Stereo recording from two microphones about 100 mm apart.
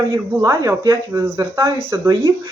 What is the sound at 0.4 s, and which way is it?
Speech, 35° right (ahead or behind).